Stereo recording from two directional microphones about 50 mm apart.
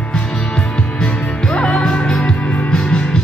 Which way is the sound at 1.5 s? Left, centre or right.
Left.